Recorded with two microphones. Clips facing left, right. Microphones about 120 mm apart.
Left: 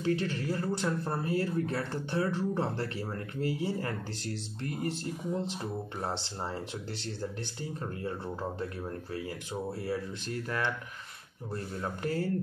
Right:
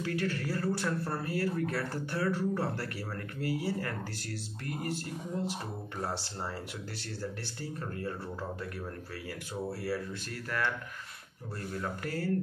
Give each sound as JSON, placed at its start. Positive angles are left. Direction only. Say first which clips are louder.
{"t": 0.0, "sound": "speech", "louder": "left 3 dB", "side_deg": 25}
{"t": 9.7, "sound": "speech", "louder": "even", "side_deg": 20}